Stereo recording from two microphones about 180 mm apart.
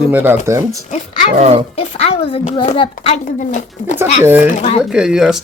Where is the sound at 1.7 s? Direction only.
35° left (ahead or behind).